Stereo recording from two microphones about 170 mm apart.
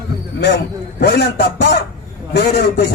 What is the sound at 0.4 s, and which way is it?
A man's voice, 80° left.